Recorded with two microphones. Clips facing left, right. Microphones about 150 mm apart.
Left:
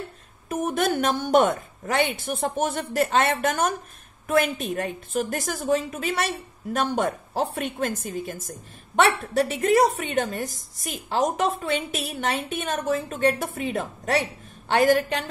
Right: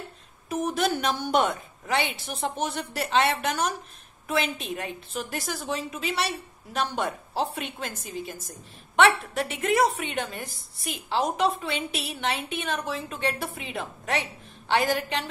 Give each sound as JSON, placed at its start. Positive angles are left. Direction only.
{"t": 0.5, "sound": "a woman's voice", "side_deg": 50}